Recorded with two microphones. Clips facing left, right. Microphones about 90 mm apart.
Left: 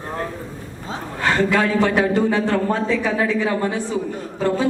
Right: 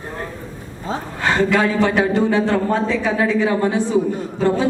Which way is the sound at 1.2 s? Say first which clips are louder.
Right 1 dB; 20° right (ahead or behind).